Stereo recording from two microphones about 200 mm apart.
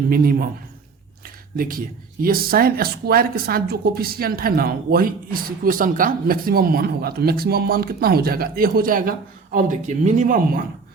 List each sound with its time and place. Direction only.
0.1 s speech: 45° right (ahead or behind)
1.5 s speech: 45° right (ahead or behind)